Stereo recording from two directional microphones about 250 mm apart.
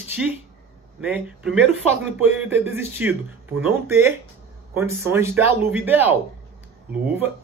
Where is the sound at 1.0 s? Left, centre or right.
Centre.